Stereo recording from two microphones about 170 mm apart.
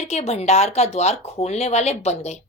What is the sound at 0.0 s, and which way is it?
Speech, 40° left (ahead or behind).